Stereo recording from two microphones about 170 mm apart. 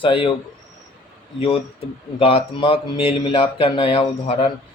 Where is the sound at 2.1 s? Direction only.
35° left (ahead or behind).